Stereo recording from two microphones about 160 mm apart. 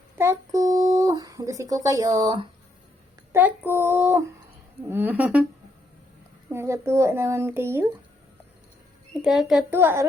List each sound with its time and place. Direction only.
0.2 s speech: 20° right (ahead or behind)
3.3 s speech: 10° right (ahead or behind)
6.5 s speech: 15° right (ahead or behind)
9.2 s a child's voice: centre (ahead or behind)
9.7 s speech: 15° right (ahead or behind)